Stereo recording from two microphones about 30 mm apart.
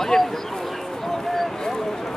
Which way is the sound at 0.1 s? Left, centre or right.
Centre.